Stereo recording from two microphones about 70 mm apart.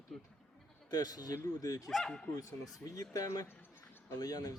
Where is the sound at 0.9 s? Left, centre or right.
Left.